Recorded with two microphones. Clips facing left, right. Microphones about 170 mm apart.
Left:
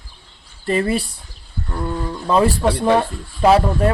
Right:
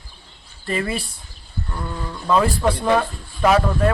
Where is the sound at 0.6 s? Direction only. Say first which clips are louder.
Left 5 dB; 35° left (ahead or behind).